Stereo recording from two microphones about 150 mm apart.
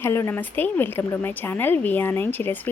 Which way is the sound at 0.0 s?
15° left (ahead or behind).